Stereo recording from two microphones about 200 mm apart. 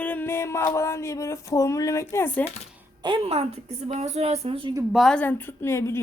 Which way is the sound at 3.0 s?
25° right (ahead or behind).